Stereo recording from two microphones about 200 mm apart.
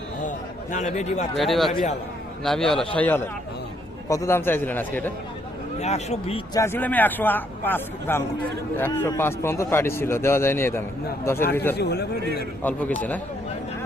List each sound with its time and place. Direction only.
0.2 s a sound: 40° left (ahead or behind)
1.4 s a man's voice: centre (ahead or behind)
5.8 s speech: 35° left (ahead or behind)
6.6 s a man's voice: 10° left (ahead or behind)
11.8 s a man's voice: 55° left (ahead or behind)
12.6 s a man's voice: 10° left (ahead or behind)